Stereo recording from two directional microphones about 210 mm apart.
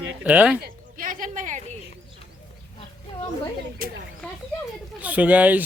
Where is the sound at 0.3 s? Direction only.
5° right (ahead or behind).